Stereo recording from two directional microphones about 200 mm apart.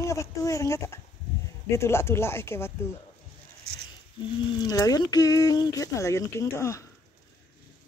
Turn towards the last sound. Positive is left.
turn(degrees=15)  # may be behind; listen again after turning